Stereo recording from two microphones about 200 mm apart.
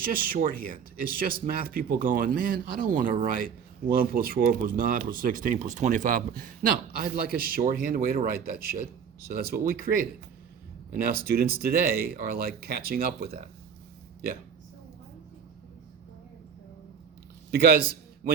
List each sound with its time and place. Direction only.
0.0 s speech: 45° right (ahead or behind)
17.5 s speech: 50° right (ahead or behind)